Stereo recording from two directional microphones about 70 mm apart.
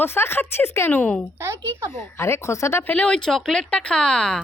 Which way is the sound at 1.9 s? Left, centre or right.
Left.